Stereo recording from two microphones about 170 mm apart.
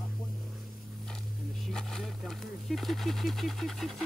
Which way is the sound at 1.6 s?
5° left (ahead or behind).